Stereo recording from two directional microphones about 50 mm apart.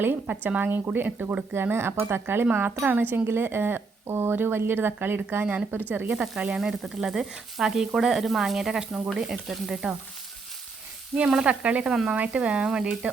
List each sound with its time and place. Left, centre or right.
0.0 s speech: right
1.5 s speech: right
3.2 s speech: right
6.6 s speech: centre
11.3 s speech: centre